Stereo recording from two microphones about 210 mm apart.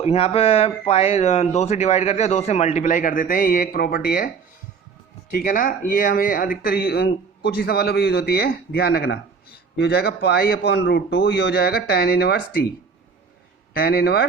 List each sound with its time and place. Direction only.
0.0 s speech: 30° left (ahead or behind)
5.3 s speech: 40° left (ahead or behind)
13.7 s speech: 45° left (ahead or behind)